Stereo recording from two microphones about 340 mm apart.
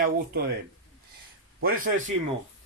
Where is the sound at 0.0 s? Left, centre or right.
Right.